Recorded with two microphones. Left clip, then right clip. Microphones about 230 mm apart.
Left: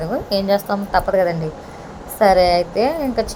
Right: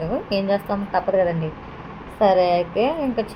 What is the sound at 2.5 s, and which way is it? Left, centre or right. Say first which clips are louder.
Speech: left 3 dB; left.